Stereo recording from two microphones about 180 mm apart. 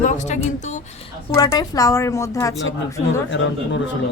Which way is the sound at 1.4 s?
20° left (ahead or behind).